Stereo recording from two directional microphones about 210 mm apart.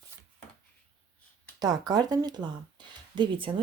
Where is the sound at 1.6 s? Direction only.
20° right (ahead or behind).